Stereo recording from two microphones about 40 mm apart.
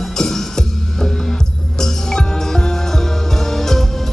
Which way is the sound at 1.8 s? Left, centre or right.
Centre.